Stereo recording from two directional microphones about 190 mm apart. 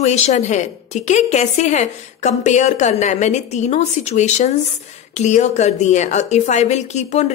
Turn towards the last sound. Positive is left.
turn(degrees=35)  # may be behind; listen again after turning